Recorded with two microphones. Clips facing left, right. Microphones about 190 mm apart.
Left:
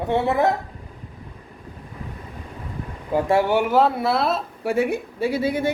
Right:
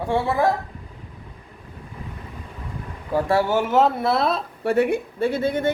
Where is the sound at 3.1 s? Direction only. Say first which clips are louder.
Left 1 dB; 15° left (ahead or behind).